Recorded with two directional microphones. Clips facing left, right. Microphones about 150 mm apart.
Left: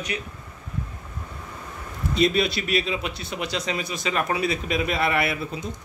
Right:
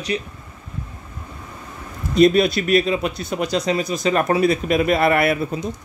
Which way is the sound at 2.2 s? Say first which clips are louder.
Right 8 dB; 50° right (ahead or behind).